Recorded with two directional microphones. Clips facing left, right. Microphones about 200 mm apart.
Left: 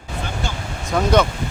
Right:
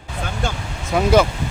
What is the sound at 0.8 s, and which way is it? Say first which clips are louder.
Speech: right 2 dB; 5° right (ahead or behind).